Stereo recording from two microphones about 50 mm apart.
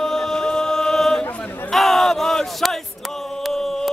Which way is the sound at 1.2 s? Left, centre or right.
Left.